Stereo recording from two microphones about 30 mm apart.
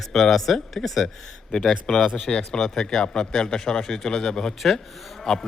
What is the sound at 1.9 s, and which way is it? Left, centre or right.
A man's voice, left.